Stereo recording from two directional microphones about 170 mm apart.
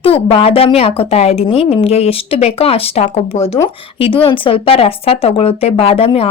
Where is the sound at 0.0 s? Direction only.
35° left (ahead or behind).